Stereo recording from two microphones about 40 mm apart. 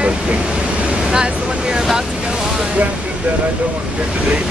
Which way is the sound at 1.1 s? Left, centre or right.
Centre.